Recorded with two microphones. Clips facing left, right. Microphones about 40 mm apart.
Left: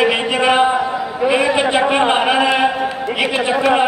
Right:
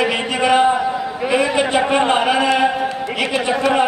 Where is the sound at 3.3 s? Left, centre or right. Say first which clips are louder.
Left 1 dB; centre.